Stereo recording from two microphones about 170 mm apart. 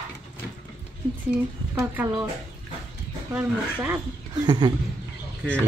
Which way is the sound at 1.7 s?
15° right (ahead or behind).